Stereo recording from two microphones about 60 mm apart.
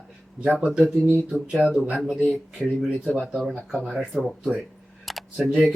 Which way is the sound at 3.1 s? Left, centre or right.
Centre.